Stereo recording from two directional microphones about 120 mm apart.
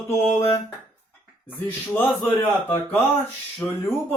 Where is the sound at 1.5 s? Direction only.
15° left (ahead or behind).